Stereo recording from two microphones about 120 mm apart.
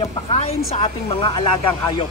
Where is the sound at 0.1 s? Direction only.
55° left (ahead or behind).